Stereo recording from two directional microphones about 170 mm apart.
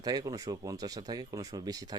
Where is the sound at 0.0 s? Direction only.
20° right (ahead or behind).